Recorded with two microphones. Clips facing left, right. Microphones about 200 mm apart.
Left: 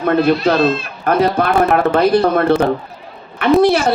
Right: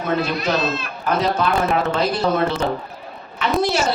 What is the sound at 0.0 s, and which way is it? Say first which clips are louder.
A man's voice: left 8 dB; 55° left (ahead or behind).